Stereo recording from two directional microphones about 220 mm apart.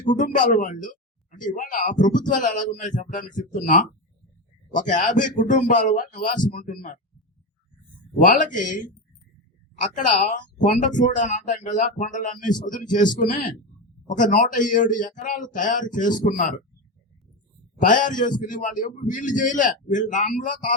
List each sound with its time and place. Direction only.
0.2 s speech: 35° left (ahead or behind)
4.7 s speech: 35° left (ahead or behind)
8.2 s speech: 35° left (ahead or behind)
9.8 s speech: 35° left (ahead or behind)
17.7 s speech: 35° left (ahead or behind)